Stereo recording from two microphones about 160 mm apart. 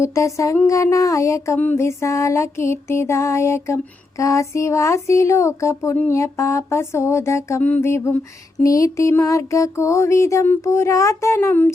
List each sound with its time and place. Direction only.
0.0 s speech: 20° left (ahead or behind)
8.6 s music: 20° left (ahead or behind)